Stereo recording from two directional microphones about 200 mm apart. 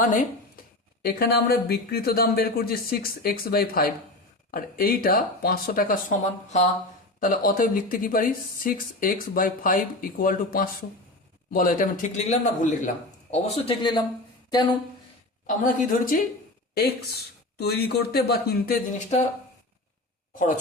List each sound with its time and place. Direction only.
0.0 s a man's voice: 40° left (ahead or behind); by 14.8 s 20° left (ahead or behind)
15.4 s speech: 45° left (ahead or behind)